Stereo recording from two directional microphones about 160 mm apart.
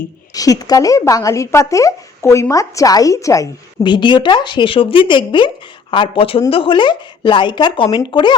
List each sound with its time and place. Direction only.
0.3 s speech: 20° left (ahead or behind)